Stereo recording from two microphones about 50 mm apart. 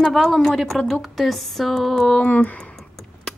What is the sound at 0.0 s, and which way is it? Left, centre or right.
Speech, centre.